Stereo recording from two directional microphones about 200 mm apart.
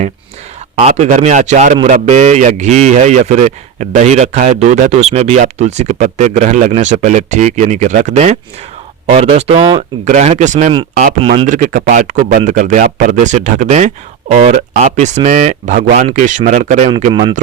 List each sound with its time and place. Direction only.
0.8 s speech: 35° right (ahead or behind)